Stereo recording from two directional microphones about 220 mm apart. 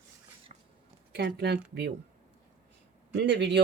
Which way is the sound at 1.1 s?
45° right (ahead or behind).